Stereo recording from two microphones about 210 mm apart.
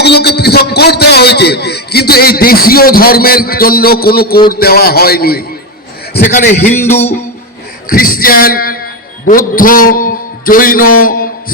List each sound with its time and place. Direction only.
0.0 s a sound: 50° left (ahead or behind)
4.6 s a man's voice: 45° left (ahead or behind)
7.9 s a man's voice: 45° left (ahead or behind)